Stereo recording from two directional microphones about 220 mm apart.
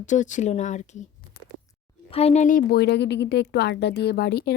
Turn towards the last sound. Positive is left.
turn(degrees=50)  # may be behind; listen again after turning